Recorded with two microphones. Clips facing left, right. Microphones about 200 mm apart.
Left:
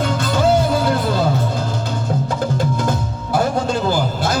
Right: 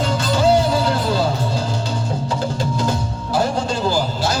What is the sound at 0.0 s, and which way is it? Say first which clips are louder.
Music: even; 55° left (ahead or behind).